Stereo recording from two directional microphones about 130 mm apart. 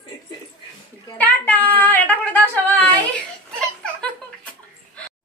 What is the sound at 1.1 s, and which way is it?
Speech, 10° left (ahead or behind).